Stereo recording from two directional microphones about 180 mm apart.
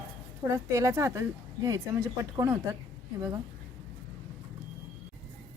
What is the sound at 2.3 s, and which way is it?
Speech, 15° right (ahead or behind).